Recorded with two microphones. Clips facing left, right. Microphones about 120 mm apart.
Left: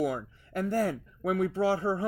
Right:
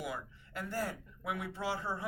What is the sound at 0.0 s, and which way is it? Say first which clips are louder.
A woman's voice: left 11 dB; 40° left (ahead or behind).